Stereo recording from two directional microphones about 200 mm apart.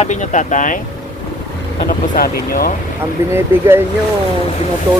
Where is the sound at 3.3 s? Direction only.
10° right (ahead or behind).